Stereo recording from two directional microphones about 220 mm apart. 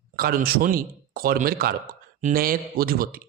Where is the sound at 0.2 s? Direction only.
45° right (ahead or behind).